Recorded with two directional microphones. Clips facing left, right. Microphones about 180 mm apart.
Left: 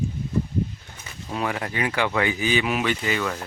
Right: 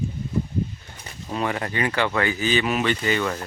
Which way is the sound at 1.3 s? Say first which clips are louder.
Right 1 dB; 5° left (ahead or behind).